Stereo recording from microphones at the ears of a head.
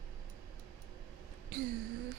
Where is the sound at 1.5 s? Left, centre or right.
Right.